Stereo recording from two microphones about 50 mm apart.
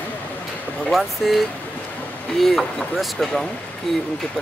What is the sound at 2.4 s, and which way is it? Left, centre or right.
Speech, centre.